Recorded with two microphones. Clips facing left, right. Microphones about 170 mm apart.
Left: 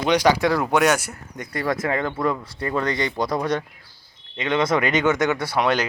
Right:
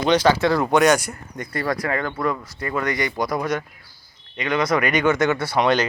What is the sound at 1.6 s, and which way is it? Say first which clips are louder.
Speech: left 1 dB; 20° left (ahead or behind).